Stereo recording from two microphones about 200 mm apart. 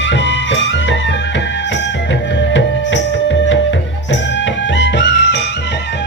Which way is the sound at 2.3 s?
65° left (ahead or behind).